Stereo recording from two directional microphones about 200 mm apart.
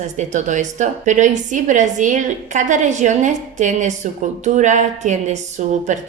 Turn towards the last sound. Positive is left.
turn(degrees=-35)  # may be behind; listen again after turning